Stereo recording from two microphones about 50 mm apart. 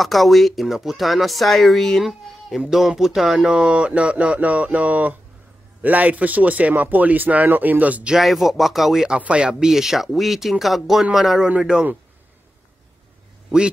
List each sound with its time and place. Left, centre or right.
0.0 s speech: centre
2.7 s speech: centre; by 8.1 s right
8.2 s speech: centre; by 11.9 s right